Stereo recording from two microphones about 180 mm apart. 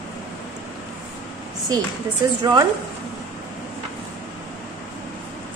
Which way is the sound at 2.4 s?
25° right (ahead or behind).